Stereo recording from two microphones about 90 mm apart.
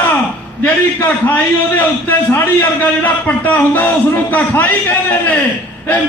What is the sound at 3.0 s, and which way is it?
A man's voice, 20° left (ahead or behind).